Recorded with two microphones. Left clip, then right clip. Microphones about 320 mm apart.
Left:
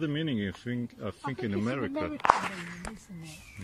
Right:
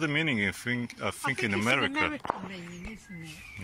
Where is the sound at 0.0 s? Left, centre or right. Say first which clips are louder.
Right 5 dB; centre.